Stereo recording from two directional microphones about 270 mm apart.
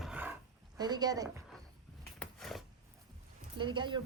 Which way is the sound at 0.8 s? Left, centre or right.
Centre.